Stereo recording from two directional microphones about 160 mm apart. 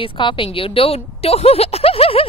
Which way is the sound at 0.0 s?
30° left (ahead or behind).